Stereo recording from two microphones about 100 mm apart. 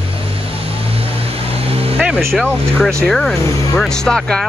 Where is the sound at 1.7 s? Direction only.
80° right.